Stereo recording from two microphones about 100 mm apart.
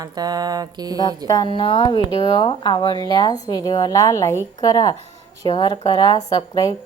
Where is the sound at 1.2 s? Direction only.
40° left (ahead or behind).